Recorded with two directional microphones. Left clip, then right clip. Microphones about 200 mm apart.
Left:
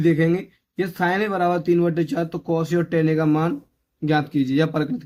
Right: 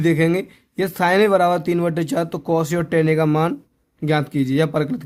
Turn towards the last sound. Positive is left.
turn(degrees=-30)  # may be behind; listen again after turning